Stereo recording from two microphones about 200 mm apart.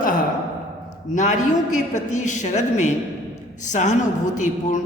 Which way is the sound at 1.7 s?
35° left (ahead or behind).